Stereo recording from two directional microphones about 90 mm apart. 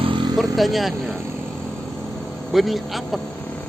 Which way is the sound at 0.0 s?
65° right (ahead or behind).